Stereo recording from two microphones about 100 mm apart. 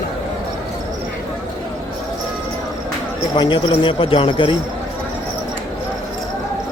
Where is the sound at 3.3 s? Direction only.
55° left (ahead or behind).